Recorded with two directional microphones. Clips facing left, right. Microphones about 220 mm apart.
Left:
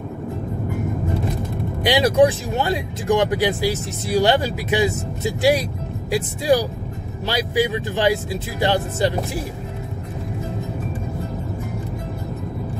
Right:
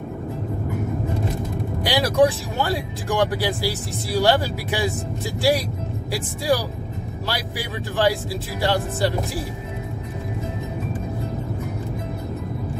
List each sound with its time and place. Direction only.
1.8 s speech: 20° left (ahead or behind)